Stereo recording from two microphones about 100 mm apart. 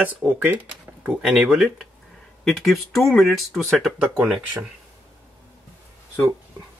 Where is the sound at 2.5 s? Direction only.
Centre (ahead or behind).